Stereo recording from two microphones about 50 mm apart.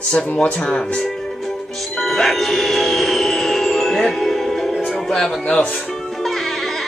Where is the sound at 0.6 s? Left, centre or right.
Centre.